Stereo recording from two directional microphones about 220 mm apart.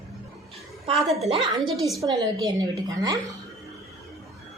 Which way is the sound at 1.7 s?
Centre (ahead or behind).